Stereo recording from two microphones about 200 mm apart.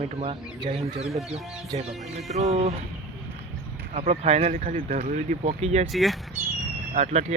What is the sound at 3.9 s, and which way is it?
Speech, 30° right (ahead or behind).